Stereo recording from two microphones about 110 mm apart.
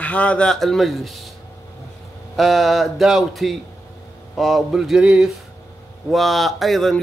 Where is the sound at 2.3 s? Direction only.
Centre (ahead or behind).